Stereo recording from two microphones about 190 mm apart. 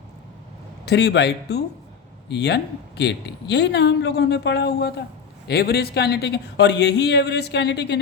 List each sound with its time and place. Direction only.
0.9 s speech: 60° left (ahead or behind)